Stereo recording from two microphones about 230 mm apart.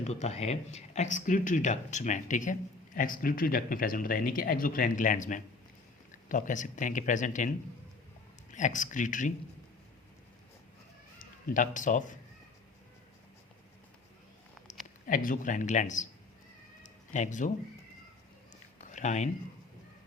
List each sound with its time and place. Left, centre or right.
0.0 s speech: left
8.5 s speech: left
11.2 s speech: left
14.7 s speech: left
16.8 s cat: left
18.8 s a sound: left